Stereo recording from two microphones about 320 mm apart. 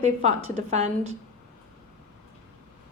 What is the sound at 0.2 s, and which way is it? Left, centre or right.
Speech, right.